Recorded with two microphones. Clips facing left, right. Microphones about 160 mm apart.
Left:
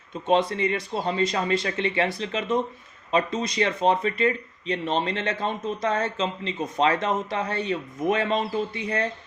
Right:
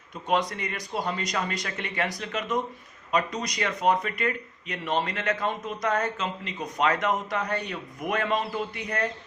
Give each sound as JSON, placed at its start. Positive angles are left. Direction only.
{"t": 0.3, "sound": "speech", "side_deg": 25}